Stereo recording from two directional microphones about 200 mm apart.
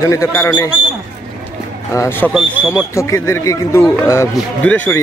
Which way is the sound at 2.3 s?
5° right (ahead or behind).